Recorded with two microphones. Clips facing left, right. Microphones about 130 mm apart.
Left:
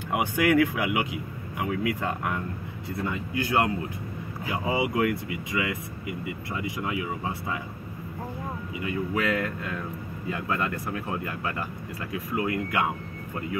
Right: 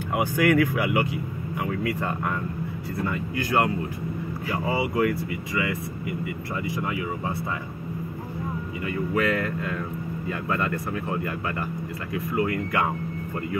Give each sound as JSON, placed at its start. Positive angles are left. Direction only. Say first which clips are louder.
{"t": 0.1, "sound": "speech", "louder": "right 1 dB", "side_deg": 15}
{"t": 8.8, "sound": "speech", "louder": "right 2 dB", "side_deg": 5}